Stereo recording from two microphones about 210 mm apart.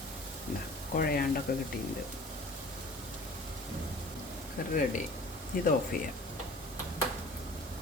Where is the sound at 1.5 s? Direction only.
45° left (ahead or behind).